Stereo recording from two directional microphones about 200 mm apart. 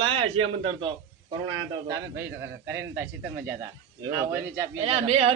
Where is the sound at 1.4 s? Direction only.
15° right (ahead or behind).